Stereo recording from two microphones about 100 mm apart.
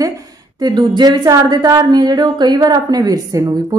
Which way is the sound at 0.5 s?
45° right (ahead or behind).